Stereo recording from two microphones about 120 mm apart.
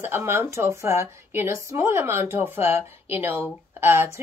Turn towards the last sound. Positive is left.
turn(degrees=-20)  # may be behind; listen again after turning